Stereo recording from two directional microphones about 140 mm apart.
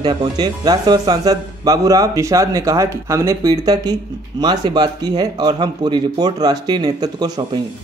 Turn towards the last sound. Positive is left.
turn(degrees=-30)  # may be behind; listen again after turning